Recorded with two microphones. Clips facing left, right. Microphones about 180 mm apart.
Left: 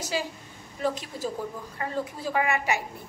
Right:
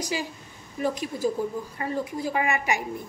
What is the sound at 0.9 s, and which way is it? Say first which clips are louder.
Speech: right 6 dB; 15° right (ahead or behind).